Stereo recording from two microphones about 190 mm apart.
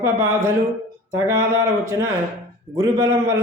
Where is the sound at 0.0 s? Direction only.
15° right (ahead or behind).